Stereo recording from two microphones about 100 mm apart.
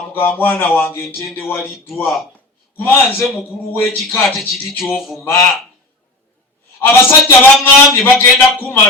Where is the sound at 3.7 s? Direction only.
25° left (ahead or behind).